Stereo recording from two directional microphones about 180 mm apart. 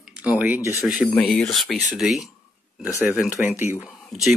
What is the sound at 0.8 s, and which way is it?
Speech, centre (ahead or behind).